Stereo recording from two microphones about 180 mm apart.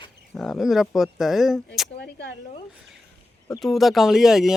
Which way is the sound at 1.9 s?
70° left (ahead or behind).